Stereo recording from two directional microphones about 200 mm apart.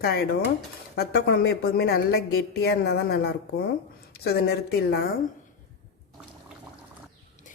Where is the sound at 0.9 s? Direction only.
50° left (ahead or behind).